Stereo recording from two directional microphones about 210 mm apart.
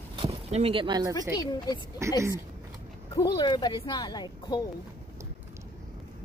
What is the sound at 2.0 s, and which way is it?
Speech, 15° right (ahead or behind).